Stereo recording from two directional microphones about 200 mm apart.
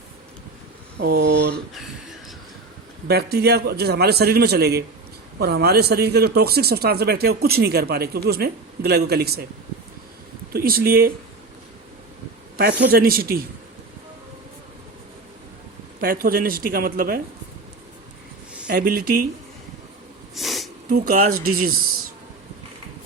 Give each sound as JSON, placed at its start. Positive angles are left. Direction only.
{"t": 0.9, "sound": "speech", "side_deg": -50}
{"t": 1.7, "sound": "a sound", "side_deg": 0}
{"t": 3.1, "sound": "speech", "side_deg": -50}
{"t": 10.5, "sound": "speech", "side_deg": -50}
{"t": 12.9, "sound": "speech", "side_deg": -50}
{"t": 16.0, "sound": "speech", "side_deg": -45}
{"t": 18.7, "sound": "speech", "side_deg": -45}
{"t": 20.3, "sound": "a sound", "side_deg": 0}
{"t": 21.1, "sound": "speech", "side_deg": -45}